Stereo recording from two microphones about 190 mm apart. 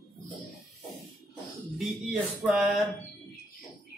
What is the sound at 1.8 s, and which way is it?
Speech, 5° right (ahead or behind).